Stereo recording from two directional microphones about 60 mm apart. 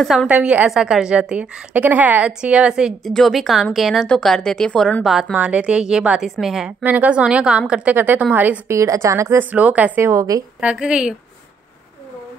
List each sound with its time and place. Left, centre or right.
0.0 s a woman's voice: centre
0.3 s speech: right
0.7 s a woman's voice: centre
3.1 s a woman's voice: centre
5.3 s a woman's voice: right; by 6.7 s centre
6.8 s speech: right
7.2 s a woman's voice: centre
7.9 s a woman's voice: right
8.6 s a woman's voice: right
9.4 s speech: right
10.1 s a woman's voice: right
10.6 s a woman's voice: centre